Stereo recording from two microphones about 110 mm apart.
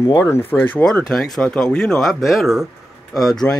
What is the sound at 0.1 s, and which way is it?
Speech, 25° left (ahead or behind).